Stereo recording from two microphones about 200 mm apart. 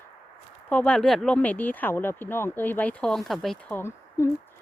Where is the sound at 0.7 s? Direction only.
5° left (ahead or behind).